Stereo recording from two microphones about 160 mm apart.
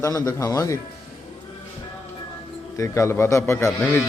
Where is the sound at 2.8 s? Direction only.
20° left (ahead or behind).